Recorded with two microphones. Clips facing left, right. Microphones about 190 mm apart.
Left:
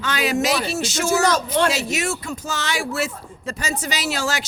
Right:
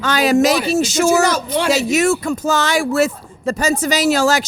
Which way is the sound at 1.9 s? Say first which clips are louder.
Right 9 dB; 50° right (ahead or behind).